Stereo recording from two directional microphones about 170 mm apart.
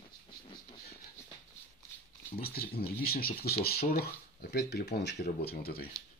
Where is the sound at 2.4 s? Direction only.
65° left (ahead or behind).